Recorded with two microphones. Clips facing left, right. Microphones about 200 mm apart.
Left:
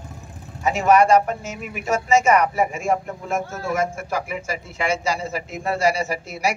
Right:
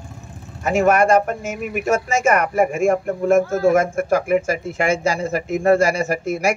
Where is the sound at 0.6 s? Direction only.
50° right (ahead or behind).